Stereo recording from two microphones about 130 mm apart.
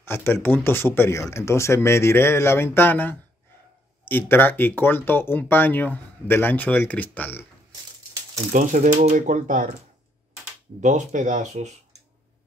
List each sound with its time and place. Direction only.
0.0 s speech: 15° left (ahead or behind)
8.5 s speech: 70° right (ahead or behind); by 9.7 s 90° right
10.8 s speech: 70° right (ahead or behind)
11.5 s speech: 60° right (ahead or behind)